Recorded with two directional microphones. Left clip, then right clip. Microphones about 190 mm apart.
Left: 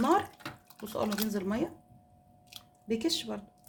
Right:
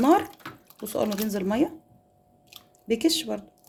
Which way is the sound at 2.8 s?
40° right (ahead or behind).